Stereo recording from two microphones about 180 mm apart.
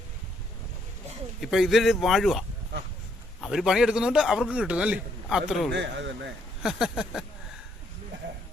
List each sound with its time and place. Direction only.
1.4 s a man's voice: centre (ahead or behind)
3.4 s a man's voice: centre (ahead or behind)
5.7 s a man's voice: 85° right
6.6 s a man's voice: 5° right (ahead or behind)